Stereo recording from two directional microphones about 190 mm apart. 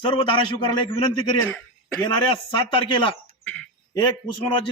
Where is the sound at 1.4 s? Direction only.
10° left (ahead or behind).